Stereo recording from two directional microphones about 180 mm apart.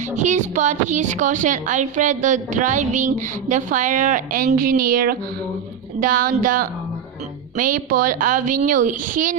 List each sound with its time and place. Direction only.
0.2 s a woman's voice: 40° right (ahead or behind)